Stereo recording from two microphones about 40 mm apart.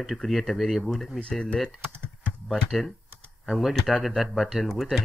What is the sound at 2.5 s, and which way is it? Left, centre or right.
Speech, centre.